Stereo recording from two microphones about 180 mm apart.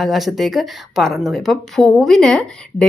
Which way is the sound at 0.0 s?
Centre (ahead or behind).